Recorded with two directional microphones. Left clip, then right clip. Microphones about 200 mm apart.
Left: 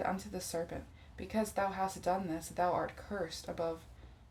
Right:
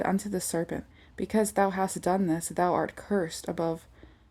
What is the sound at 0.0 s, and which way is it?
Speech, 50° right (ahead or behind).